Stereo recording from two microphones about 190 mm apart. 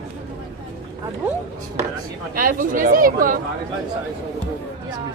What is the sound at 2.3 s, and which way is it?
Speech, 45° right (ahead or behind).